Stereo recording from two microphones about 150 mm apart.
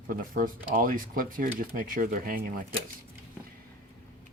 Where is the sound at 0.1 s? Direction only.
65° right (ahead or behind).